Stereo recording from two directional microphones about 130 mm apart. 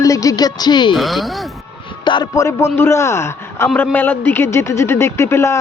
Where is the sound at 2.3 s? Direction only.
20° left (ahead or behind).